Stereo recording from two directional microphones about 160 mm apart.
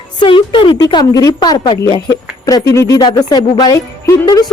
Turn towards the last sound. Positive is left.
turn(degrees=20)  # may be behind; listen again after turning